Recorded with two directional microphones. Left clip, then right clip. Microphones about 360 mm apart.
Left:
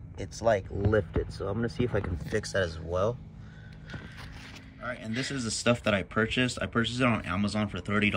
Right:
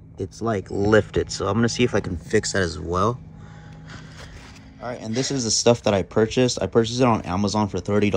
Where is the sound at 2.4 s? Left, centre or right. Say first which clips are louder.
Right 6 dB; right.